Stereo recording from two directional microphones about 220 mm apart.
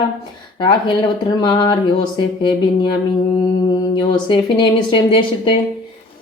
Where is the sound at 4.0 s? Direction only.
20° left (ahead or behind).